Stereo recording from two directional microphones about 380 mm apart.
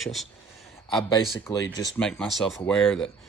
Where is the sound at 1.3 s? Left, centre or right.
Centre.